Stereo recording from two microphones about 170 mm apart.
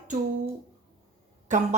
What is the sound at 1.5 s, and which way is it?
Speech, 45° right (ahead or behind).